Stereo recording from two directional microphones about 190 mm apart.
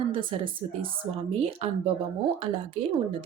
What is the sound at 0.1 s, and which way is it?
A woman's voice, 25° right (ahead or behind).